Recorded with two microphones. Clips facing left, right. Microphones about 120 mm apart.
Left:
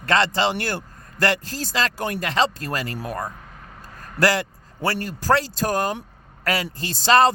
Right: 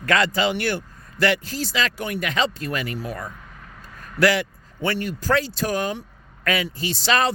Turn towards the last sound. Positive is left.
turn(degrees=35)  # may be behind; listen again after turning